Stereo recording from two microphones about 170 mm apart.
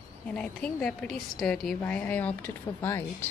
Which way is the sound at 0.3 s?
5° left (ahead or behind).